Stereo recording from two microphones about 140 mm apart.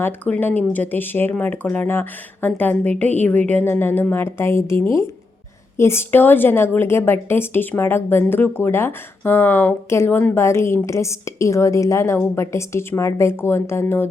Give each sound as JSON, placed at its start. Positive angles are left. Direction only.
{"t": 0.0, "sound": "a woman's voice", "side_deg": 15}